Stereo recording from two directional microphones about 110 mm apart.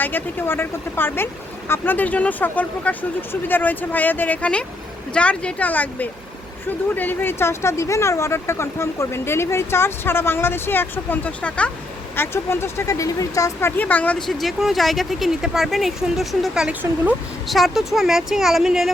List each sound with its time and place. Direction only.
0.0 s speech: 20° left (ahead or behind)
14.2 s speech: centre (ahead or behind)